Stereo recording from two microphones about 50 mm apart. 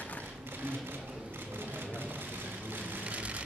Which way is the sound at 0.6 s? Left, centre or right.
Right.